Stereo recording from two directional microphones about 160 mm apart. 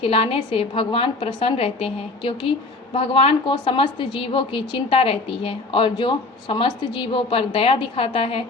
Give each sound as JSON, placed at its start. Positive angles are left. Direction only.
{"t": 0.0, "sound": "a woman's voice", "side_deg": 35}